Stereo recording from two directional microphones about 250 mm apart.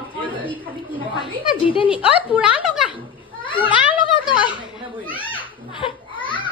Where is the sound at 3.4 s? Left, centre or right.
Centre.